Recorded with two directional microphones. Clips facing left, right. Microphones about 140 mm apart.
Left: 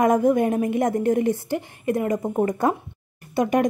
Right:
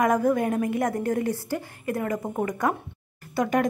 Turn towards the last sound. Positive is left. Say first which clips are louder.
# left 3 dB
turn(degrees=20)  # may be behind; listen again after turning